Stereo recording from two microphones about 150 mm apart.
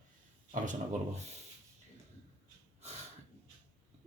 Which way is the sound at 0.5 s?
60° right (ahead or behind).